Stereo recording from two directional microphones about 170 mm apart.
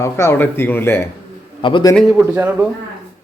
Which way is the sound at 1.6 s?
30° left (ahead or behind).